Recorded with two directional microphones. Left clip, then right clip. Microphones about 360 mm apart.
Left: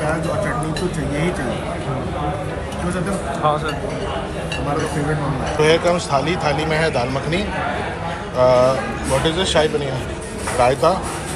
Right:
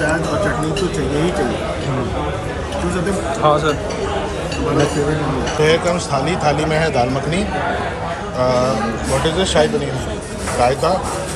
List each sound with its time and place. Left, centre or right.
3.4 s a man's voice: centre
5.6 s a man's voice: centre